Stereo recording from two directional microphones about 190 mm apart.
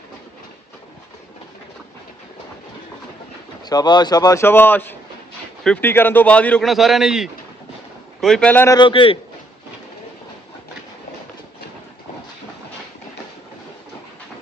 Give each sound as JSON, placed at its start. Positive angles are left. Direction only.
{"t": 3.6, "sound": "speech", "side_deg": 20}